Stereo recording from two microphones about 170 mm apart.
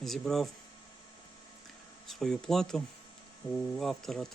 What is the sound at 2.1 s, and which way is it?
Speech, centre (ahead or behind).